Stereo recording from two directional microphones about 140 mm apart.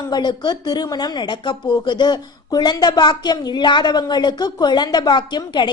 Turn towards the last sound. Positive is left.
turn(degrees=35)  # may be behind; listen again after turning